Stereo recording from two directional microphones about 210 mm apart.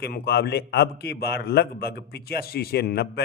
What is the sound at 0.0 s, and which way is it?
A man's voice, 50° left (ahead or behind).